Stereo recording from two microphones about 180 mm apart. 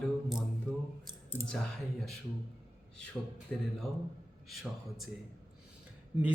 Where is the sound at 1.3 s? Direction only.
10° left (ahead or behind).